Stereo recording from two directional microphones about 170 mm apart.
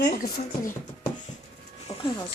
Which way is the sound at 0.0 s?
65° left (ahead or behind).